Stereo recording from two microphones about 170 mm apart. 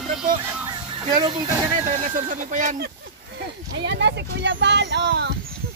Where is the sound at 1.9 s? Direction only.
50° right (ahead or behind).